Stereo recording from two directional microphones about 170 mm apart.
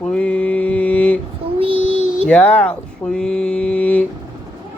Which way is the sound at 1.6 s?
35° right (ahead or behind).